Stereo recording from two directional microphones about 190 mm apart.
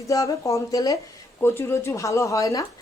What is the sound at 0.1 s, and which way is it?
Speech, 15° left (ahead or behind).